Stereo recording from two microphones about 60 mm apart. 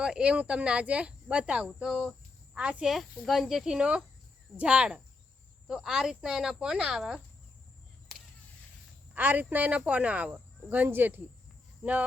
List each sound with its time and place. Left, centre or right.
0.0 s speech: centre
1.9 s speech: centre
2.6 s speech: centre
2.9 s speech: centre
4.5 s speech: right
5.6 s speech: centre
9.1 s speech: right